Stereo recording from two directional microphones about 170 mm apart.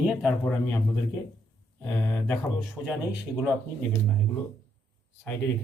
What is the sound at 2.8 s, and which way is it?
Speech, 5° right (ahead or behind).